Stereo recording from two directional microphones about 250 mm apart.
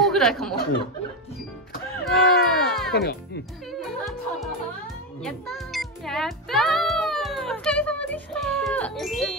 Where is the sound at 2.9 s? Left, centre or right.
Left.